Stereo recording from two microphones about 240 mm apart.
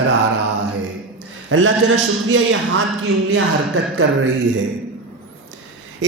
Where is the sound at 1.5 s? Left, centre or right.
Right.